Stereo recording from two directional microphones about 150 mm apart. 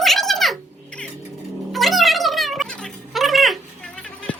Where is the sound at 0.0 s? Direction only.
Centre (ahead or behind).